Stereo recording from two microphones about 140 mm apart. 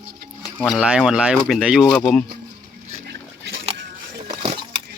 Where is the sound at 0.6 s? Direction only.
5° right (ahead or behind).